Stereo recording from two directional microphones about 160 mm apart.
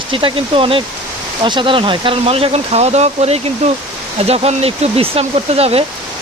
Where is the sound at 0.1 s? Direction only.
30° right (ahead or behind).